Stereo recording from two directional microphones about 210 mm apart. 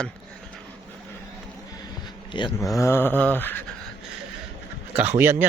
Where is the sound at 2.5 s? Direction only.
Centre (ahead or behind).